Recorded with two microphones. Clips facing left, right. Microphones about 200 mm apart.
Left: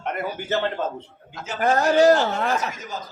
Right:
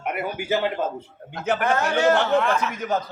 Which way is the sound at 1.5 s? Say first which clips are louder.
Right 9 dB; 60° right (ahead or behind).